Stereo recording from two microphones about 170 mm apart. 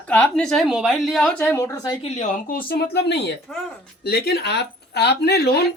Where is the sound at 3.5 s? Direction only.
5° left (ahead or behind).